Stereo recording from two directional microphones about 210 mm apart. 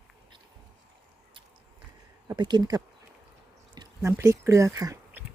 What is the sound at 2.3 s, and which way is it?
Speech, 20° right (ahead or behind).